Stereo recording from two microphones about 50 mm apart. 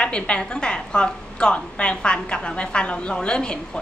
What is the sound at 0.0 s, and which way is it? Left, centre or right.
A woman's voice, left.